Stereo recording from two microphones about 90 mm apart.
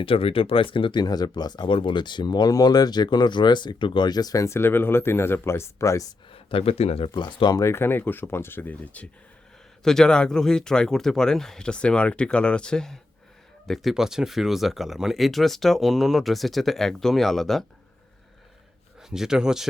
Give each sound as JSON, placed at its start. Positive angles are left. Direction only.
{"t": 0.0, "sound": "speech", "side_deg": 90}
{"t": 1.7, "sound": "speech", "side_deg": 65}
{"t": 6.3, "sound": "speech", "side_deg": 90}
{"t": 7.5, "sound": "speech", "side_deg": 30}
{"t": 18.9, "sound": "speech", "side_deg": -5}